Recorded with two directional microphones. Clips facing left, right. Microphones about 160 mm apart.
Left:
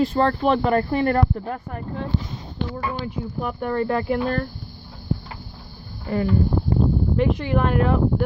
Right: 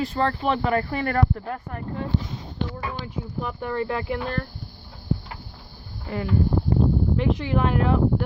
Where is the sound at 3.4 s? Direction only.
45° left (ahead or behind).